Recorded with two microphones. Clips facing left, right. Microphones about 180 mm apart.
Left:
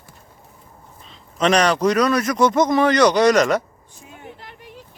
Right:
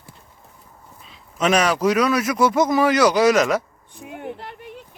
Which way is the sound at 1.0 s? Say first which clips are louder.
Left 1 dB; 5° right (ahead or behind).